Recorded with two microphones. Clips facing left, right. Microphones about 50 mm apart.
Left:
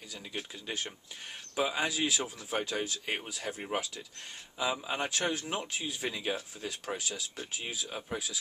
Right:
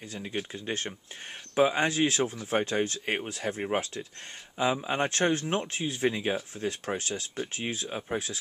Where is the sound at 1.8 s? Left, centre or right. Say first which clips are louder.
Right 6 dB; right.